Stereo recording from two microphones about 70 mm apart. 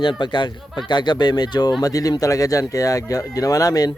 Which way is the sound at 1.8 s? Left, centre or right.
Left.